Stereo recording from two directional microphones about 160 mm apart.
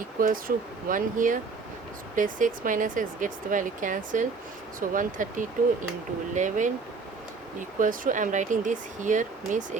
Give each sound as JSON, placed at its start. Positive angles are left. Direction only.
{"t": 0.2, "sound": "speech", "side_deg": -60}
{"t": 7.8, "sound": "speech", "side_deg": -55}